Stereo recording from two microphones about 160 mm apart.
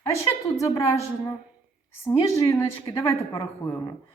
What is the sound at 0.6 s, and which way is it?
Speech, 20° left (ahead or behind).